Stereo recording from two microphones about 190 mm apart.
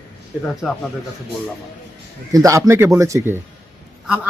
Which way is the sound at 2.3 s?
15° right (ahead or behind).